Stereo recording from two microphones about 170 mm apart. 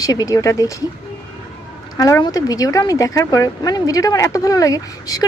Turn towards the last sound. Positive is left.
turn(degrees=20)  # may be behind; listen again after turning